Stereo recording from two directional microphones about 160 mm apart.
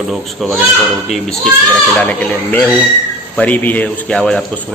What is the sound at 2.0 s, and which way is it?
A man's voice, 10° left (ahead or behind).